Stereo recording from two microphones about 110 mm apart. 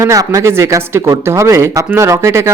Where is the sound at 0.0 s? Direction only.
35° right (ahead or behind).